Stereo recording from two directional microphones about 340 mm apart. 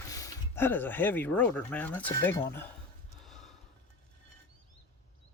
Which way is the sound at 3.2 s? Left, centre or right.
Centre.